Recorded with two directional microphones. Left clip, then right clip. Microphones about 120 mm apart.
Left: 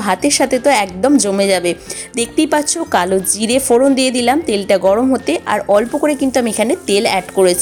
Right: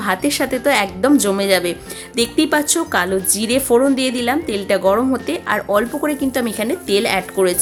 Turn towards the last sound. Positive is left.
turn(degrees=35)  # may be behind; listen again after turning